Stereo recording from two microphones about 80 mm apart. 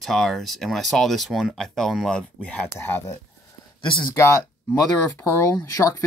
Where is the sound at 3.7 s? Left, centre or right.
Left.